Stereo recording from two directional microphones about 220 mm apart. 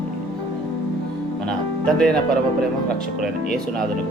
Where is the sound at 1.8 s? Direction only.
5° left (ahead or behind).